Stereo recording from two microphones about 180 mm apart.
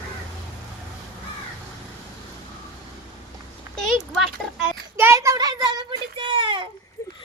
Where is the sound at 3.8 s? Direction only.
Centre (ahead or behind).